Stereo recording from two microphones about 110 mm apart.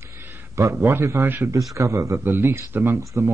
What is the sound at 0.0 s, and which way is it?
A man's voice, 25° right (ahead or behind).